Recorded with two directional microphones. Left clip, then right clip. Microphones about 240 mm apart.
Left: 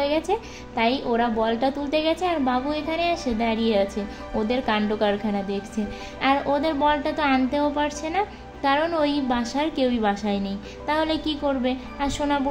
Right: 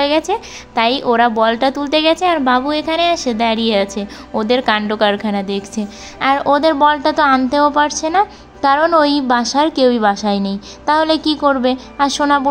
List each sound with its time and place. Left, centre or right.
0.0 s a woman's voice: centre